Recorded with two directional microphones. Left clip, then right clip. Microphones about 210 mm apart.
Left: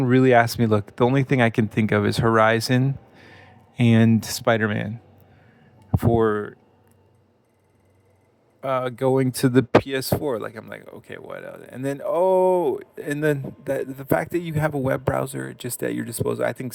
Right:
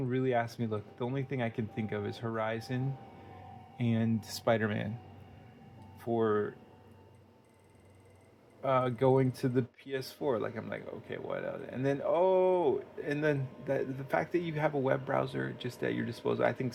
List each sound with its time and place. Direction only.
0.0 s speech: 55° left (ahead or behind); by 4.9 s 35° left (ahead or behind)
6.0 s speech: 50° left (ahead or behind)
8.6 s speech: 50° left (ahead or behind)